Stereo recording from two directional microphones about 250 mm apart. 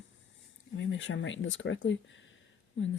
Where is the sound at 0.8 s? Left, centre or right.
Left.